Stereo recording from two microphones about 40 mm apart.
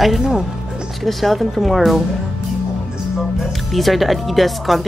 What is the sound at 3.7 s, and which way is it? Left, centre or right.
Speech, centre.